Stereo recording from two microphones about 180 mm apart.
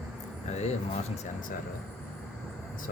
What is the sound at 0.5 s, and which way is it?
Speech, 40° left (ahead or behind).